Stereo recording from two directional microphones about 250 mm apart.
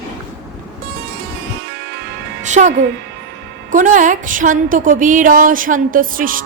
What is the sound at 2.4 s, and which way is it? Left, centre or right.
Music, right.